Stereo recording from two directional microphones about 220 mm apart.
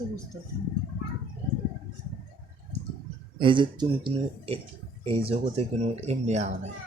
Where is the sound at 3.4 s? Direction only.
20° right (ahead or behind).